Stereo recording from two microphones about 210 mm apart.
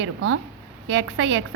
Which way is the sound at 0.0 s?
60° right (ahead or behind).